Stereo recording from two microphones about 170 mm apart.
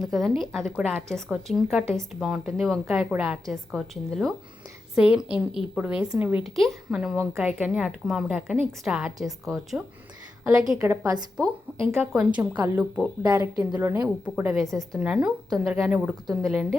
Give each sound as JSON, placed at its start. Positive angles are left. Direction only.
{"t": 0.0, "sound": "a woman's voice", "side_deg": 0}
{"t": 6.4, "sound": "a woman's voice", "side_deg": 0}
{"t": 10.8, "sound": "a woman's voice", "side_deg": -20}
{"t": 11.9, "sound": "a woman's voice", "side_deg": -5}